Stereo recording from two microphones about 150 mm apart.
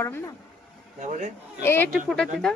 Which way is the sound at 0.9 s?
55° right (ahead or behind).